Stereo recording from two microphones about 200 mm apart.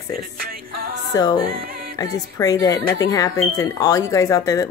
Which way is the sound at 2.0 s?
15° left (ahead or behind).